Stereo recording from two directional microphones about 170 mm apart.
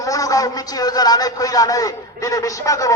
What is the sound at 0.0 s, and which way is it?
Speech, 20° left (ahead or behind).